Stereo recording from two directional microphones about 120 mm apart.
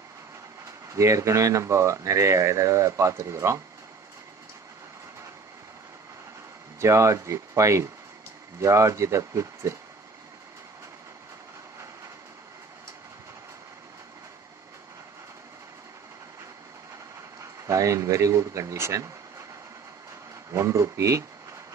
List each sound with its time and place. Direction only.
0.7 s speech: 25° right (ahead or behind)
6.8 s speech: 25° right (ahead or behind)
17.4 s a man's voice: 25° right (ahead or behind)
20.5 s speech: 25° right (ahead or behind)